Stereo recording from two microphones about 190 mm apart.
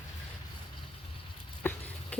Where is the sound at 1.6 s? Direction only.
10° left (ahead or behind).